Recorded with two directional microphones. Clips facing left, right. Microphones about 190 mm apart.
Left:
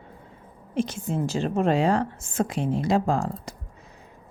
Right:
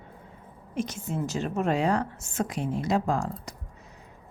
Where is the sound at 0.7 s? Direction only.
30° left (ahead or behind).